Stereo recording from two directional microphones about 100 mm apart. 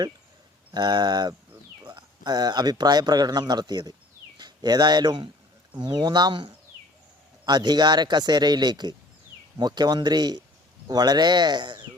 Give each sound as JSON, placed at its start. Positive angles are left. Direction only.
{"t": 0.7, "sound": "speech", "side_deg": -45}